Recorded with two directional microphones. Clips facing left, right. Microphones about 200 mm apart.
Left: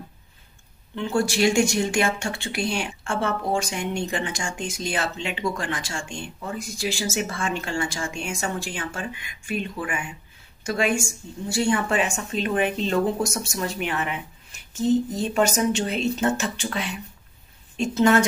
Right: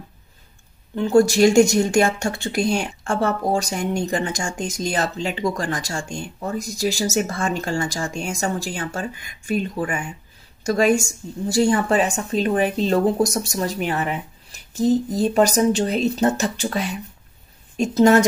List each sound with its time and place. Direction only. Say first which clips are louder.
0.9 s speech: right 8 dB; 40° right (ahead or behind)